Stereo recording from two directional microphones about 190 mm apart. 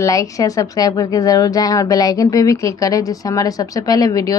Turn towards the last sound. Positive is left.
turn(degrees=20)  # may be behind; listen again after turning